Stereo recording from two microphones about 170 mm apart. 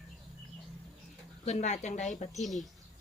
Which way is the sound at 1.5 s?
40° left (ahead or behind).